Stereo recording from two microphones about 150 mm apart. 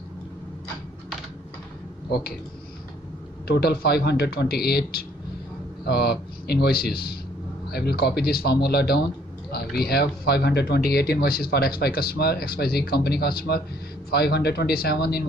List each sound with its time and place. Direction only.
2.0 s speech: 90° left
3.4 s speech: 90° left